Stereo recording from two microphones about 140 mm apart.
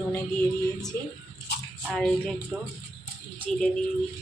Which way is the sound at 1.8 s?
5° left (ahead or behind).